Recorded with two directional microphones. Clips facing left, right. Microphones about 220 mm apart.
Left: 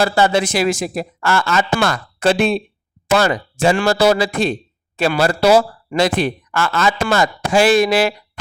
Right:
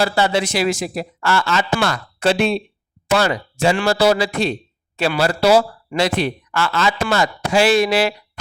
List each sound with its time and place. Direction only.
0.0 s speech: 45° left (ahead or behind)